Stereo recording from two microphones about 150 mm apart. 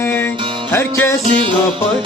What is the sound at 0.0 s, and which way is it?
Music, 15° left (ahead or behind).